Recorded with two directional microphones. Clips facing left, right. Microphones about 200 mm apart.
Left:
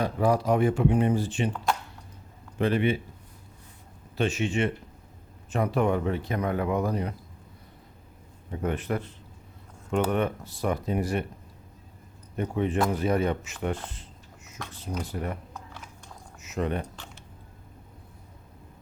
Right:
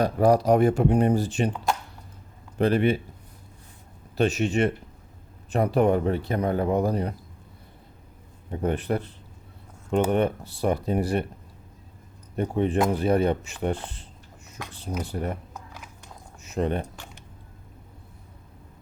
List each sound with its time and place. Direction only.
0.0 s speech: 40° right (ahead or behind)
2.6 s speech: 40° right (ahead or behind)
4.2 s speech: 40° right (ahead or behind)
8.4 s speech: 35° right (ahead or behind)
12.4 s speech: 35° right (ahead or behind)
14.6 s speech: 10° right (ahead or behind)
15.0 s speech: 30° right (ahead or behind)
16.4 s speech: 30° right (ahead or behind)